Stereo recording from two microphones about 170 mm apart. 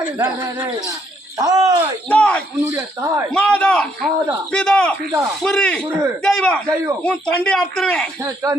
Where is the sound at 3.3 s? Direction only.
5° left (ahead or behind).